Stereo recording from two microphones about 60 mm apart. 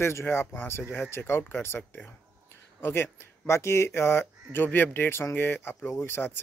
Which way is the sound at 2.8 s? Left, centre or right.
Left.